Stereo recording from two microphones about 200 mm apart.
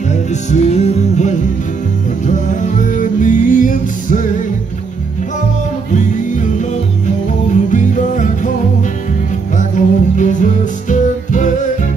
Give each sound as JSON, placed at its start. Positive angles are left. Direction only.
{"t": 0.1, "sound": "music", "side_deg": 35}
{"t": 5.9, "sound": "music", "side_deg": 40}
{"t": 9.6, "sound": "music", "side_deg": 40}